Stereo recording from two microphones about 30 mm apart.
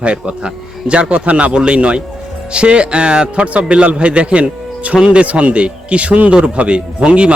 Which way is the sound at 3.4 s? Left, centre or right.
Right.